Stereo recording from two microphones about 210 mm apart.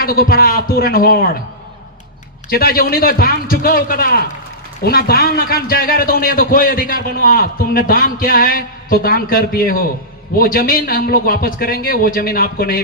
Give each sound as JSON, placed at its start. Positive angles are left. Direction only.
{"t": 0.0, "sound": "a man's voice", "side_deg": 45}
{"t": 2.5, "sound": "a man's voice", "side_deg": 45}